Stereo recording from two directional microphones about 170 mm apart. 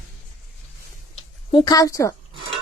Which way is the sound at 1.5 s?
25° left (ahead or behind).